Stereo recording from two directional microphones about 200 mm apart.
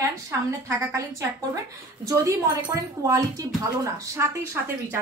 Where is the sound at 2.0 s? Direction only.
15° right (ahead or behind).